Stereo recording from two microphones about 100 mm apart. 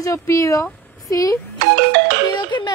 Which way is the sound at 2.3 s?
50° left (ahead or behind).